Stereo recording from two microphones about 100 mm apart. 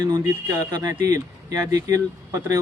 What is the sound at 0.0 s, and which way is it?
Speech, 30° right (ahead or behind).